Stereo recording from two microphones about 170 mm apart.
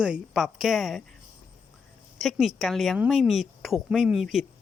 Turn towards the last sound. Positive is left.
turn(degrees=-5)  # may be behind; listen again after turning